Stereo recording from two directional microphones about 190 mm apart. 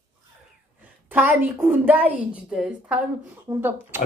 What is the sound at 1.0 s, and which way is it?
A woman's voice, 10° right (ahead or behind).